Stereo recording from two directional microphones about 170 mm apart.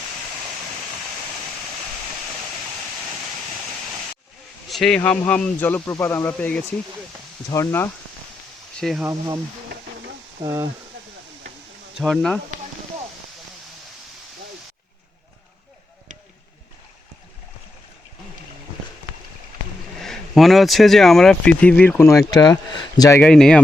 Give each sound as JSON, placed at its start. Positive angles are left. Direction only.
{"t": 4.7, "sound": "speech", "side_deg": 5}
{"t": 9.0, "sound": "speech", "side_deg": -20}
{"t": 10.4, "sound": "speech", "side_deg": -20}
{"t": 11.9, "sound": "speech", "side_deg": 0}
{"t": 20.0, "sound": "speech", "side_deg": 0}
{"t": 22.3, "sound": "speech", "side_deg": 25}
{"t": 23.2, "sound": "speech", "side_deg": 5}